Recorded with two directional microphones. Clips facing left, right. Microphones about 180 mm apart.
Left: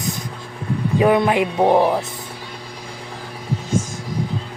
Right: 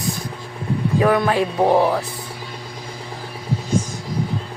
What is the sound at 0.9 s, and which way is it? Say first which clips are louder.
Speech: left 2 dB; 20° left (ahead or behind).